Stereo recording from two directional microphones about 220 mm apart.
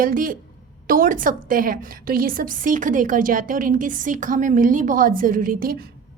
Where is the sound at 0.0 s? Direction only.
40° right (ahead or behind).